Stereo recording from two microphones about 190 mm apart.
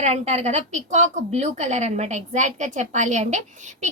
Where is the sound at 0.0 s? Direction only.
35° right (ahead or behind).